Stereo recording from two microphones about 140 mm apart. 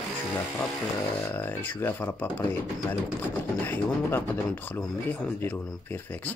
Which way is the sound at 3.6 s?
15° left (ahead or behind).